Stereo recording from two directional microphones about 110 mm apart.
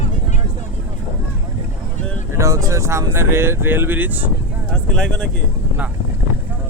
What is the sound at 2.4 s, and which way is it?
Speech, 30° right (ahead or behind).